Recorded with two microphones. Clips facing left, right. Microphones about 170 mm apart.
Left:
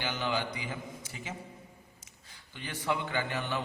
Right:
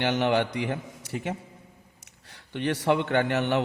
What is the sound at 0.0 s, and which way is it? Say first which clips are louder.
A man's voice: right 9 dB; 70° right (ahead or behind).